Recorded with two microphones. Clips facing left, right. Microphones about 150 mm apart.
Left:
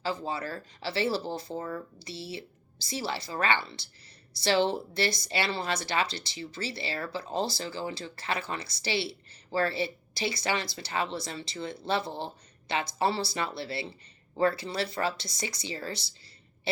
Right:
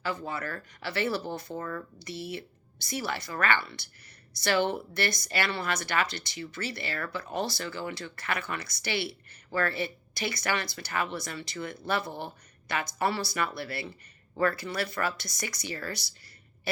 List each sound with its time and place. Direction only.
0.0 s a woman's voice: 30° left (ahead or behind)